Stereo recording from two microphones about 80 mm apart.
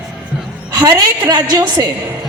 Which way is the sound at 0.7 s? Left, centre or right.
Right.